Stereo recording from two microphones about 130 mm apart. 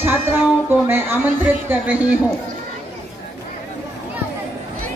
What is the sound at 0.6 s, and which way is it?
Speech, 20° right (ahead or behind).